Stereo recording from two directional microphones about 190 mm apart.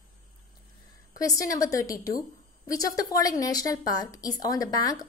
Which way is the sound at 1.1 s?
15° left (ahead or behind).